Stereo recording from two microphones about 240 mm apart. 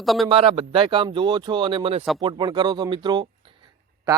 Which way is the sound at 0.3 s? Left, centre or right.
Right.